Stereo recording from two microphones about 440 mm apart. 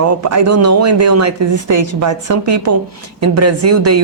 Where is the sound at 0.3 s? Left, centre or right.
Right.